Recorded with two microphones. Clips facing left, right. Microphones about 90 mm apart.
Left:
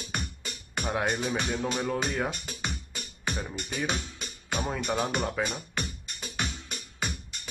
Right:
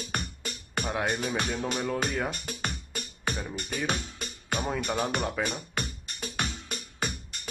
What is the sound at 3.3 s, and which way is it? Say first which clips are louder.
Speech: even; centre (ahead or behind).